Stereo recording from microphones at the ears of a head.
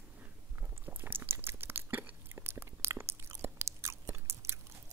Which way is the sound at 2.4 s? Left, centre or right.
Right.